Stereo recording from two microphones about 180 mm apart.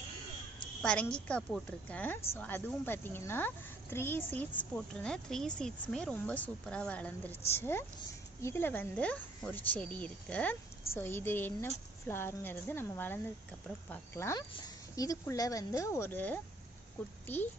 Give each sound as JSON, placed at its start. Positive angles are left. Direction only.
{"t": 0.8, "sound": "a woman's voice", "side_deg": 5}